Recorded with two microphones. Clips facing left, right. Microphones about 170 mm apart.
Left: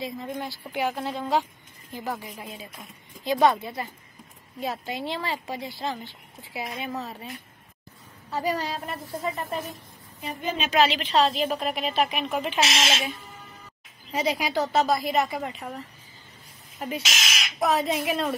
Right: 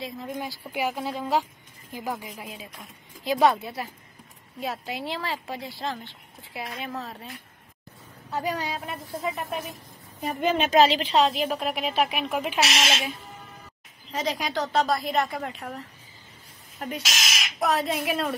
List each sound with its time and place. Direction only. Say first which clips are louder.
0.0 s a woman's voice: left 1 dB; centre (ahead or behind)
2.3 s a woman's voice: even; centre (ahead or behind)
8.3 s a woman's voice: left 1 dB; centre (ahead or behind)
10.4 s a woman's voice: right 6 dB; 75° right (ahead or behind)
10.7 s a woman's voice: right 2 dB; 35° right (ahead or behind)
11.1 s speech: even; 10° right (ahead or behind)
14.1 s a woman's voice: left 3 dB; 10° left (ahead or behind)